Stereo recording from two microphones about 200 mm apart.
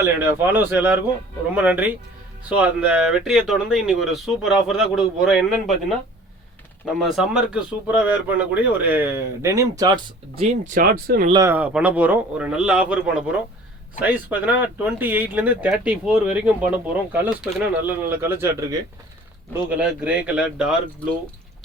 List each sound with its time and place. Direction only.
0.0 s speech: 10° right (ahead or behind)
6.8 s speech: centre (ahead or behind); by 10.0 s 20° right (ahead or behind)
10.3 s speech: 30° right (ahead or behind)
10.8 s speech: 50° right (ahead or behind)
11.3 s speech: 15° right (ahead or behind)